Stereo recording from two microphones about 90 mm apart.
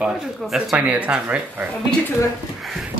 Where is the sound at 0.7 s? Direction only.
15° right (ahead or behind).